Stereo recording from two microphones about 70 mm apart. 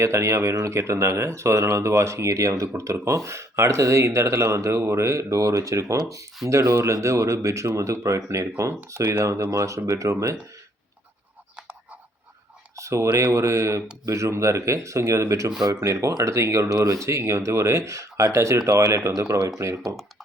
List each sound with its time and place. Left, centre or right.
0.0 s speech: right
12.7 s a sound: right
13.1 s speech: right